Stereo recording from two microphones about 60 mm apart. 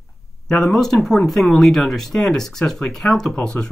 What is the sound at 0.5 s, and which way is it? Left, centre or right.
Speech, centre.